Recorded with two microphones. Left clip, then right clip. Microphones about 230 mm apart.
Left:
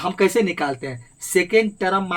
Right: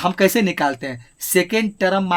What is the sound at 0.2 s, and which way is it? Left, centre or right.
Speech, right.